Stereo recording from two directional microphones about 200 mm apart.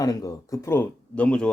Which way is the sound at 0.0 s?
20° left (ahead or behind).